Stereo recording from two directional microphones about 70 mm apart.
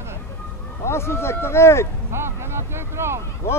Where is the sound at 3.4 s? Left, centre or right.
Left.